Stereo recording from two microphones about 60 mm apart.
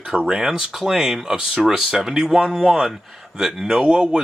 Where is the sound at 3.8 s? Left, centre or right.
Centre.